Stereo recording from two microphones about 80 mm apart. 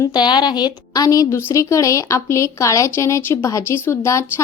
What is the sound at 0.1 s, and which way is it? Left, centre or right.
A woman's voice, left.